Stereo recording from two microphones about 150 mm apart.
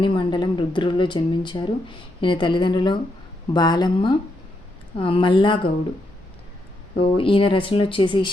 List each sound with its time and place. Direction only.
0.0 s speech: 35° left (ahead or behind)
7.0 s speech: 35° left (ahead or behind)